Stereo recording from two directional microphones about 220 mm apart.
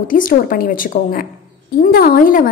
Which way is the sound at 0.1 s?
40° left (ahead or behind).